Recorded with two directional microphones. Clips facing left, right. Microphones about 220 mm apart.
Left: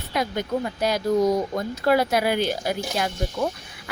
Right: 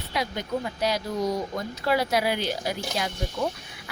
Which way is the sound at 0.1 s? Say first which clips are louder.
Left 4 dB; 50° left (ahead or behind).